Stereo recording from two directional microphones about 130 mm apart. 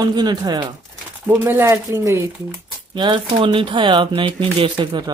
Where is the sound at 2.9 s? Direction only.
35° right (ahead or behind).